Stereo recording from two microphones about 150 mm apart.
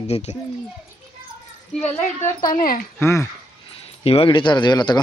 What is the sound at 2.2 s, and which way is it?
Speech, 65° left (ahead or behind).